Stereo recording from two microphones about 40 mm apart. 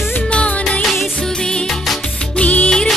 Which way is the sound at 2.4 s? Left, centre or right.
Left.